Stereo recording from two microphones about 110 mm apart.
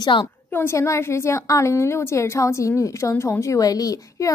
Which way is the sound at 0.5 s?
25° left (ahead or behind).